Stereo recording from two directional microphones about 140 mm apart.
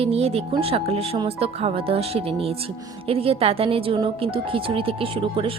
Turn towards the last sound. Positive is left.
turn(degrees=-40)  # may be behind; listen again after turning